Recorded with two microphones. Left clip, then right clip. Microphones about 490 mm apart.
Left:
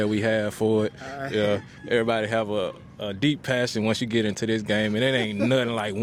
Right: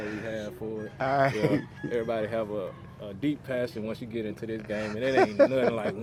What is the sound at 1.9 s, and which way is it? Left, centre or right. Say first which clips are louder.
Speech: left 6 dB; left.